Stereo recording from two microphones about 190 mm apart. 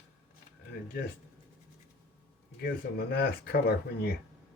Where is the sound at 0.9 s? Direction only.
55° left (ahead or behind).